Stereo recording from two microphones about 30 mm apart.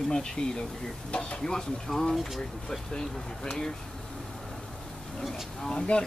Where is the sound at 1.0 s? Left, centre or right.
Left.